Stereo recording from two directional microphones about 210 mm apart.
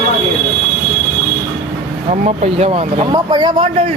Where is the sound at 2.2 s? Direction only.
30° right (ahead or behind).